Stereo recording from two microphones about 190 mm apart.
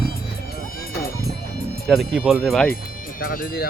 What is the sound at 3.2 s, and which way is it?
Speech, 50° left (ahead or behind).